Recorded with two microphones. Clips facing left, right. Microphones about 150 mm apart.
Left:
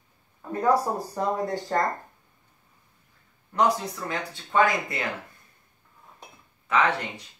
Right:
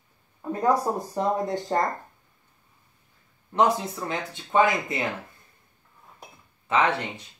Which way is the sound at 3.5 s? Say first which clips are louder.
Right 1 dB; 25° right (ahead or behind).